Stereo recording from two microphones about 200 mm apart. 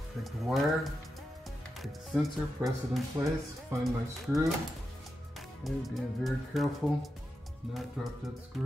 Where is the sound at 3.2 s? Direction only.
15° right (ahead or behind).